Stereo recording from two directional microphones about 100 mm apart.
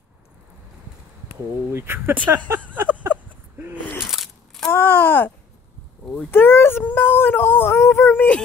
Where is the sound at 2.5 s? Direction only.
20° right (ahead or behind).